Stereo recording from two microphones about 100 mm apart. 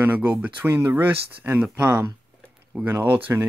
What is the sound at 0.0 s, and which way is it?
Speech, 15° right (ahead or behind).